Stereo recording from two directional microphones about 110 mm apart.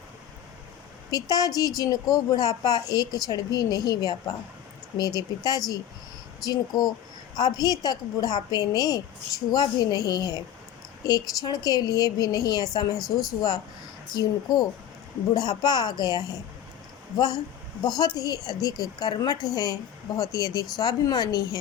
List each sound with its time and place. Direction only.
1.1 s a woman's voice: 35° left (ahead or behind)